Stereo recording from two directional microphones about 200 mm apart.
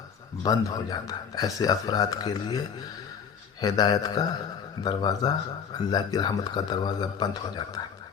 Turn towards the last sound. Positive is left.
turn(degrees=20)  # may be behind; listen again after turning